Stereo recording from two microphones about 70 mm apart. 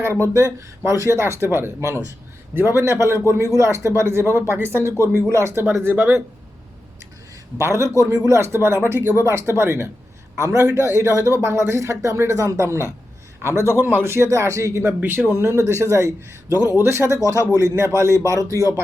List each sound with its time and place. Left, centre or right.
0.0 s speech: right
1.4 s speech: right
5.3 s speech: right
5.7 s speech: right
7.6 s speech: right
8.1 s speech: right
8.4 s speech: right
10.3 s speech: right
13.6 s speech: right
17.5 s speech: right